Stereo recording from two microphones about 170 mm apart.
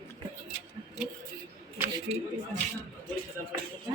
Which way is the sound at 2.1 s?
40° right (ahead or behind).